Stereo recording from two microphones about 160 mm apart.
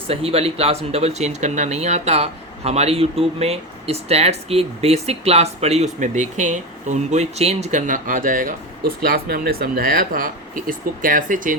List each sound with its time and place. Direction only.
0.1 s speech: 40° right (ahead or behind); by 8.5 s 55° right (ahead or behind)
9.0 s speech: 70° right (ahead or behind)